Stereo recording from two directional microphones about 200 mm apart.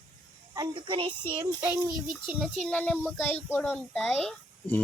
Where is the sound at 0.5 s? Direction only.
20° right (ahead or behind).